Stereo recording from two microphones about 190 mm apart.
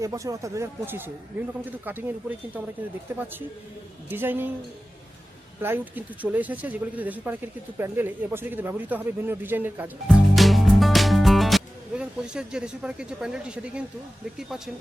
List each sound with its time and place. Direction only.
0.0 s speech: 15° right (ahead or behind)
5.6 s speech: 10° right (ahead or behind)